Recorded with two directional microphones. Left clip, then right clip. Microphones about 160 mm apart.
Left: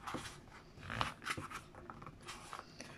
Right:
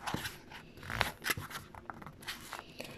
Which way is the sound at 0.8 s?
65° right (ahead or behind).